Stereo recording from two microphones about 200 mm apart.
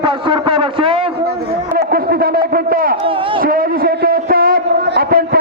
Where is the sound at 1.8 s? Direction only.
50° right (ahead or behind).